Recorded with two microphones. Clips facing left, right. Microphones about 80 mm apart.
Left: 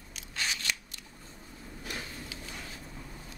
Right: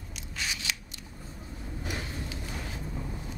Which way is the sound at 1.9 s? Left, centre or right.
Centre.